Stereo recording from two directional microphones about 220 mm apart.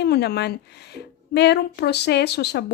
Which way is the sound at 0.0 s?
50° left (ahead or behind).